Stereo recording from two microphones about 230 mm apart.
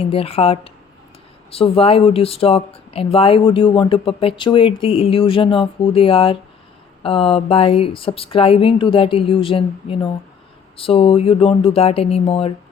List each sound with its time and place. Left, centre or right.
0.0 s speech: left